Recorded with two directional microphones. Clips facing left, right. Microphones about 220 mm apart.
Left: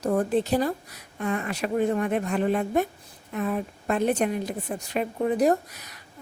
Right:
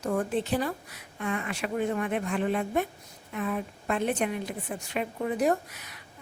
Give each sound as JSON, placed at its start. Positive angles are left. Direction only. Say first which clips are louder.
{"t": 0.0, "sound": "a woman's voice", "louder": "left 5 dB", "side_deg": 35}